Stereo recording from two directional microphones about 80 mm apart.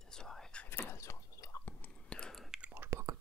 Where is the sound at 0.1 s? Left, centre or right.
Centre.